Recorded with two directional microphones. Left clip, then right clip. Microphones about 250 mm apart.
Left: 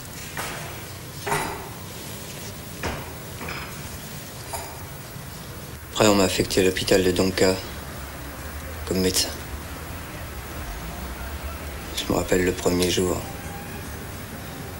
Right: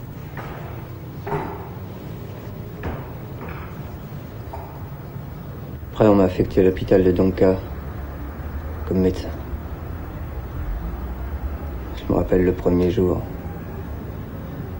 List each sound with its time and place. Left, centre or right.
1.2 s a sound: centre
5.9 s speech: centre
8.8 s speech: centre
12.3 s speech: centre